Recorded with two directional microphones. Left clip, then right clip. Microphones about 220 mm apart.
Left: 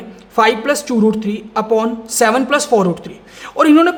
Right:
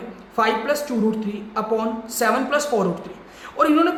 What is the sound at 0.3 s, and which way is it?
A woman's voice, 45° left (ahead or behind).